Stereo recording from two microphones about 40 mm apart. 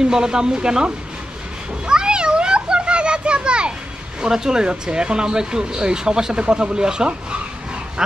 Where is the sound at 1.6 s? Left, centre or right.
Right.